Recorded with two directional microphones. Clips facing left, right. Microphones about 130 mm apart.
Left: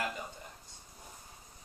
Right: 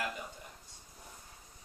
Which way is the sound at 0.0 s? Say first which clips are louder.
Left 1 dB; 25° left (ahead or behind).